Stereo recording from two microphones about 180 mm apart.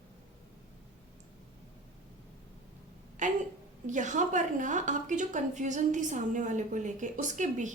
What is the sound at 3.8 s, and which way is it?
A woman's voice, 45° right (ahead or behind).